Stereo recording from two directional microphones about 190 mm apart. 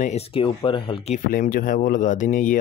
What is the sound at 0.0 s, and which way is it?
Speech, 35° left (ahead or behind).